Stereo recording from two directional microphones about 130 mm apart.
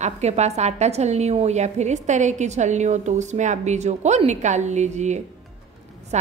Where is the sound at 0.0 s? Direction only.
60° right (ahead or behind).